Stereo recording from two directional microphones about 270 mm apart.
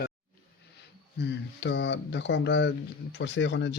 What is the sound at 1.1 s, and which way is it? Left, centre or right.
Speech, left.